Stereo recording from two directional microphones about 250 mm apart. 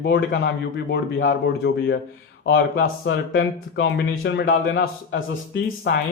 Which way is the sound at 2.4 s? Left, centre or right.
Left.